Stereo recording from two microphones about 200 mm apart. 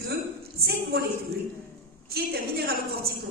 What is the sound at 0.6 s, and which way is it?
Speech, 50° right (ahead or behind).